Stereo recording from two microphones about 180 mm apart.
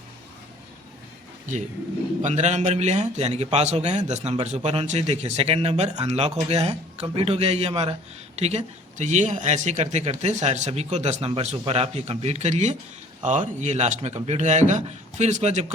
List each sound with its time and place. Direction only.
2.2 s speech: 40° right (ahead or behind)